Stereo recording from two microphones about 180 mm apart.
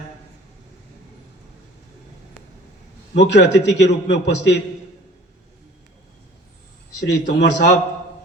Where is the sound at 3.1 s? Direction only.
75° left (ahead or behind).